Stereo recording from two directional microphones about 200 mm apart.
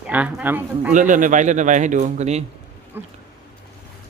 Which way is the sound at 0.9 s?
40° right (ahead or behind).